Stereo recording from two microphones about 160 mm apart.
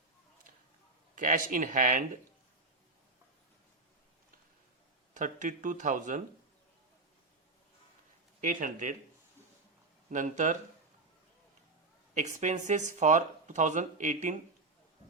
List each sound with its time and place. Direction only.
1.1 s speech: 55° right (ahead or behind)
5.1 s speech: 50° right (ahead or behind)
8.4 s speech: 55° right (ahead or behind)
10.1 s speech: 50° right (ahead or behind)
12.1 s speech: 50° right (ahead or behind)